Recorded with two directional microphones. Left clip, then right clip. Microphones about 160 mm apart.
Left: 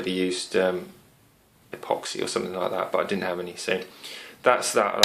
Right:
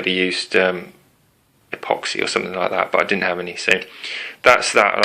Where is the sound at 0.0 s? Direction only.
15° right (ahead or behind).